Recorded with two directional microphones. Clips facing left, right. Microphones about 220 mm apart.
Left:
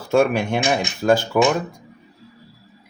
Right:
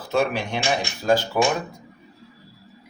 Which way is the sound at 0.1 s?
50° left (ahead or behind).